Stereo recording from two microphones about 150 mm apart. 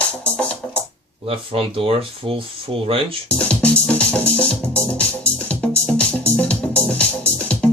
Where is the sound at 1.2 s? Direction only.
40° right (ahead or behind).